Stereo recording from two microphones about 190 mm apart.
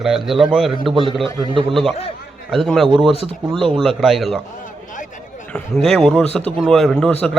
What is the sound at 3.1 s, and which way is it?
Speech, 30° left (ahead or behind).